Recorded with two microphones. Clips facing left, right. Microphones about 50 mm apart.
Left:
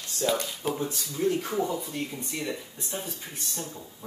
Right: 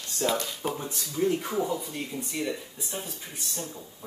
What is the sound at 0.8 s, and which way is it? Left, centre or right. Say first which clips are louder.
Speech: right 2 dB; centre.